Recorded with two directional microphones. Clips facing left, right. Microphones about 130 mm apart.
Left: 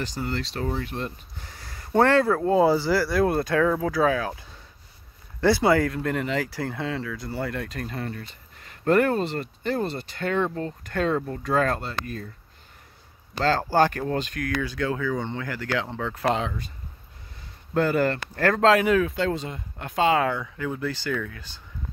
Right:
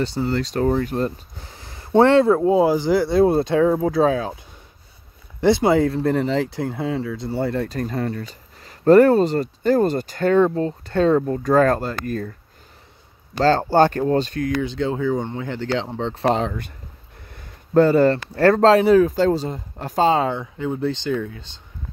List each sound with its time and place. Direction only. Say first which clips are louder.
0.0 s speech: right 7 dB; 30° right (ahead or behind)
1.6 s a sound: right 6 dB; 25° right (ahead or behind)
2.4 s speech: right 3 dB; 10° right (ahead or behind)
5.4 s speech: right 4 dB; 20° right (ahead or behind); by 12.3 s 45° right (ahead or behind)
13.4 s speech: right 5 dB; 30° right (ahead or behind)
17.7 s speech: right 8 dB; 30° right (ahead or behind)